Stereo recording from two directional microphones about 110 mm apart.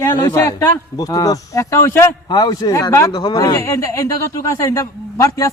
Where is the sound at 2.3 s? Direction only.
35° left (ahead or behind).